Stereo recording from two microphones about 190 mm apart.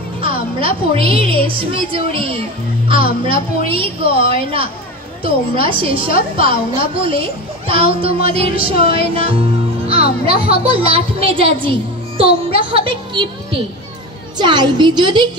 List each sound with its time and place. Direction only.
0.2 s a woman's voice: 30° right (ahead or behind)
10.6 s a woman's voice: 30° right (ahead or behind)